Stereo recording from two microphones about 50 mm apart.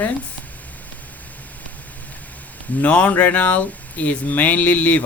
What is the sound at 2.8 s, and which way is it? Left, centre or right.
Speech, left.